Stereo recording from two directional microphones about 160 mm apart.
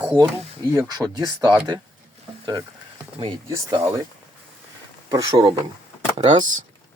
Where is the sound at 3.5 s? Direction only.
25° right (ahead or behind).